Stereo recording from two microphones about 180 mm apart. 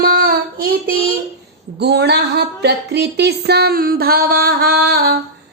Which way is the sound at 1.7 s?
65° right (ahead or behind).